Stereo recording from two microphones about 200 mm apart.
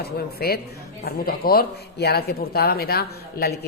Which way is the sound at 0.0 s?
50° left (ahead or behind).